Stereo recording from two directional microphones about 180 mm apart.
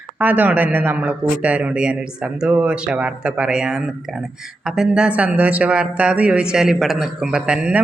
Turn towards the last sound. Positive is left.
turn(degrees=-5)  # may be behind; listen again after turning